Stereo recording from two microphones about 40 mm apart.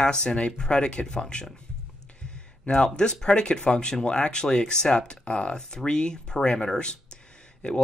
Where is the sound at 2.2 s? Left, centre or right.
Left.